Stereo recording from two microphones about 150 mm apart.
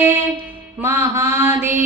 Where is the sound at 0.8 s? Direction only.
15° right (ahead or behind).